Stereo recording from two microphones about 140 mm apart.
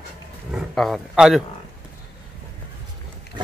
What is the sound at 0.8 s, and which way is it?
Speech, centre (ahead or behind).